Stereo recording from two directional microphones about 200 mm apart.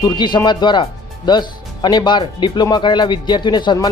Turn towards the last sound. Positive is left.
turn(degrees=20)  # may be behind; listen again after turning